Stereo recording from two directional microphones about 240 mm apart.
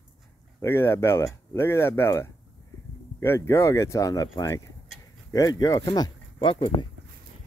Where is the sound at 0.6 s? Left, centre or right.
Centre.